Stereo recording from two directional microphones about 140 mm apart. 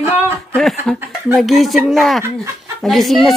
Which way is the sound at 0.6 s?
Centre (ahead or behind).